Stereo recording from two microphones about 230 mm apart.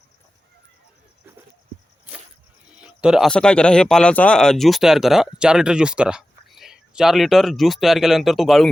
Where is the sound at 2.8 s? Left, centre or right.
Centre.